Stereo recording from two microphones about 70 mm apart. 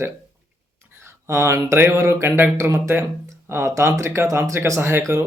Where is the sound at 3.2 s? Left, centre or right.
Right.